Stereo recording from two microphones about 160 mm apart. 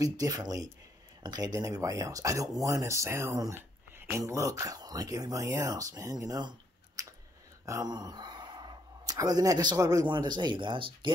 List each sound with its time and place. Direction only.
0.0 s speech: 25° right (ahead or behind)
7.0 s chewing: 20° right (ahead or behind)
7.6 s speech: 20° right (ahead or behind)